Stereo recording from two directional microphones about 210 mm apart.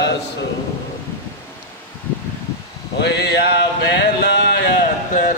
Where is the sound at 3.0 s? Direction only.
55° left (ahead or behind).